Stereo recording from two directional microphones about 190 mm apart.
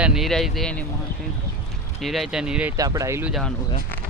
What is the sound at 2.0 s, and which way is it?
Speech, centre (ahead or behind).